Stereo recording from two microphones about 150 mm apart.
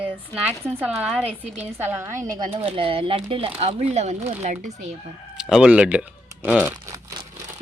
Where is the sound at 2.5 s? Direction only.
40° right (ahead or behind).